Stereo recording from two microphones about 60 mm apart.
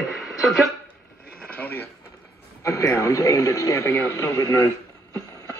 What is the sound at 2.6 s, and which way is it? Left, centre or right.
A man's voice, left.